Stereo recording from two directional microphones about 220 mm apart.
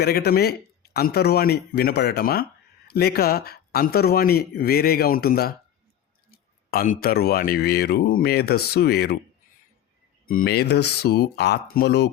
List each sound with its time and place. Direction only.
0.0 s speech: 45° left (ahead or behind)
10.2 s speech: 40° left (ahead or behind)